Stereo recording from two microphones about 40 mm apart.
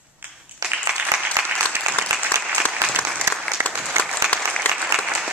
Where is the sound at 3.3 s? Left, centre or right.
Right.